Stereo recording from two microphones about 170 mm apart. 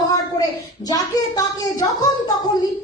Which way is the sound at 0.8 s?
25° left (ahead or behind).